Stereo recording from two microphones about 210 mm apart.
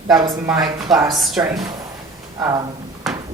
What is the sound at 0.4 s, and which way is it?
Speech, 15° right (ahead or behind).